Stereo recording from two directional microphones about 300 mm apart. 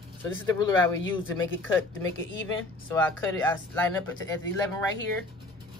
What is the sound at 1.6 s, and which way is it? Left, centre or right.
Speech, centre.